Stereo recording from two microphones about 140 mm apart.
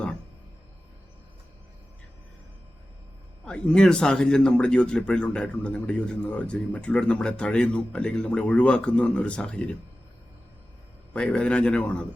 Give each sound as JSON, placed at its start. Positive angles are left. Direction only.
{"t": 3.4, "sound": "speech", "side_deg": 5}
{"t": 11.1, "sound": "speech", "side_deg": 10}